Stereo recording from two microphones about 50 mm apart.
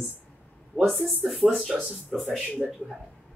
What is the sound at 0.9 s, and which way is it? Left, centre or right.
Speech, centre.